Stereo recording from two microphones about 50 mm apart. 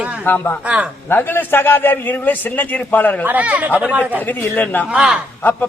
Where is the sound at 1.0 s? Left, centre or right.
Left.